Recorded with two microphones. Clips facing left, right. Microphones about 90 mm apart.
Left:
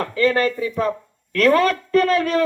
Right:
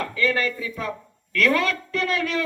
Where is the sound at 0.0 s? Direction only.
40° left (ahead or behind).